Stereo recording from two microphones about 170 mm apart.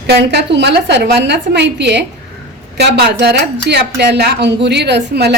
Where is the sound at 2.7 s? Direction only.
75° right (ahead or behind).